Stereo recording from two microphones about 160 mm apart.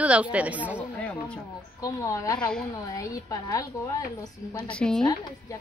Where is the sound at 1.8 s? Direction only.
20° left (ahead or behind).